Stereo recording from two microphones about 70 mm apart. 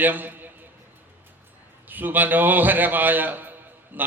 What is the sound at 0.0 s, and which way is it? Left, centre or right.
Speech, right.